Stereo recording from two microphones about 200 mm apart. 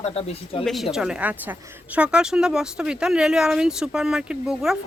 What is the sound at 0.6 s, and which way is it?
Speech, centre (ahead or behind).